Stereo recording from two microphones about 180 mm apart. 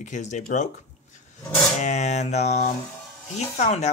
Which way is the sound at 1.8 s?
40° left (ahead or behind).